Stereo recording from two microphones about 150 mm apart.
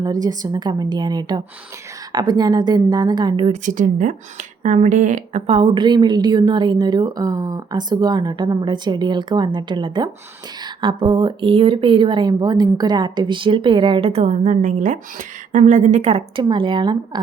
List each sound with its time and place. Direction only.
0.0 s a woman's voice: 25° right (ahead or behind)
3.5 s speech: 60° right (ahead or behind)
5.5 s a woman's voice: 35° right (ahead or behind)
16.4 s speech: 35° right (ahead or behind)